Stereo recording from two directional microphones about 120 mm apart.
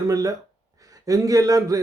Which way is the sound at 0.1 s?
30° right (ahead or behind).